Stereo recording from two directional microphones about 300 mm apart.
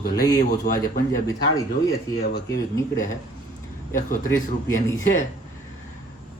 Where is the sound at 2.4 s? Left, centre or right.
Centre.